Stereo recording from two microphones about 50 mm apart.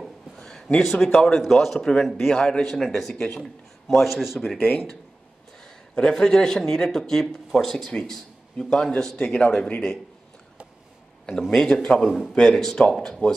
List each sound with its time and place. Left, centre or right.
0.4 s a sound: centre
1.0 s a man's voice: centre
1.8 s speech: centre
2.0 s a man's voice: centre
2.3 s speech: centre
2.8 s a man's voice: centre
3.2 s speech: centre
3.8 s a man's voice: centre
4.6 s speech: left
5.6 s speech: centre
11.2 s speech: centre
12.0 s a man's voice: centre